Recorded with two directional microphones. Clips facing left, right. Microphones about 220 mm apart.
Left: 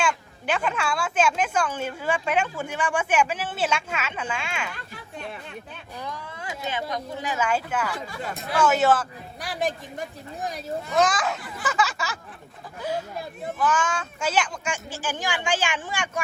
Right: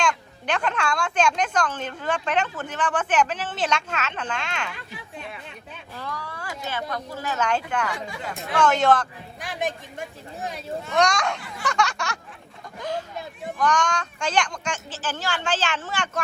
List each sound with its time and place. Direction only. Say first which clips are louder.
0.0 s speech: right 1 dB; 5° left (ahead or behind)
6.0 s a sound: right 1 dB; 20° left (ahead or behind)
6.7 s a woman's voice: left 1 dB; 20° left (ahead or behind); by 12.2 s centre (ahead or behind)
13.6 s speech: right 2 dB; 5° left (ahead or behind)